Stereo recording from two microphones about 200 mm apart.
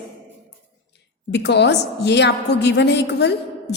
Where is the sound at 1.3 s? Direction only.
60° left (ahead or behind).